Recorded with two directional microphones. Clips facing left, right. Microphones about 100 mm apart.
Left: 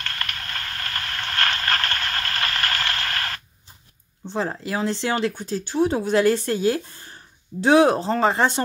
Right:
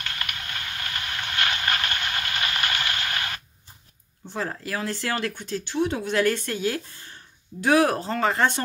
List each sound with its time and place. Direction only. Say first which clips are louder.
0.0 s a sound: left 2 dB; 15° right (ahead or behind)
4.3 s speech: left 4 dB; 25° left (ahead or behind)
5.3 s speech: left 3 dB; 35° left (ahead or behind)